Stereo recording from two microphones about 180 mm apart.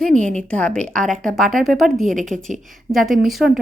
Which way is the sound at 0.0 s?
5° left (ahead or behind).